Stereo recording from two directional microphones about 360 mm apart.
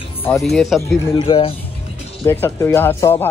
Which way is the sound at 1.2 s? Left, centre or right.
Centre.